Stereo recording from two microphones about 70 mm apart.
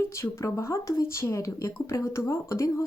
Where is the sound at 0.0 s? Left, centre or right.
Left.